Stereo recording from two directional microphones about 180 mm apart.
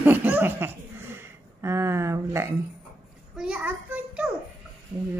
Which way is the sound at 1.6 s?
15° right (ahead or behind).